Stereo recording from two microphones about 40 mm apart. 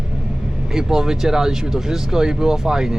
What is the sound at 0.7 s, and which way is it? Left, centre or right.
Speech, centre.